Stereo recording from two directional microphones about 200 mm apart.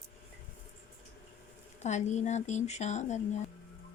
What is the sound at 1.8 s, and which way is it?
Speech, 35° left (ahead or behind).